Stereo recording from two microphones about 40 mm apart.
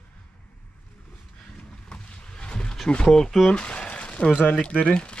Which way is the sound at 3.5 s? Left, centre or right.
Left.